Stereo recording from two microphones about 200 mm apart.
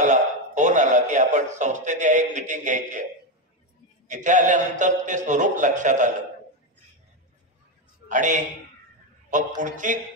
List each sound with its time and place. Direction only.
0.0 s music: 35° right (ahead or behind)
4.1 s a man's voice: 40° right (ahead or behind)
8.1 s a man's voice: 40° right (ahead or behind)
9.6 s a man's voice: 40° right (ahead or behind)